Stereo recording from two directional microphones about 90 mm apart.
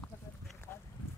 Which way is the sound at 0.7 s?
20° left (ahead or behind).